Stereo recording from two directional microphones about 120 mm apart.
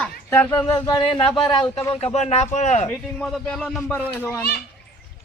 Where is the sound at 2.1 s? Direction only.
70° left (ahead or behind).